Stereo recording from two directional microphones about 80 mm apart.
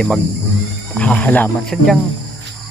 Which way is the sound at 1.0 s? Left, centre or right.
Centre.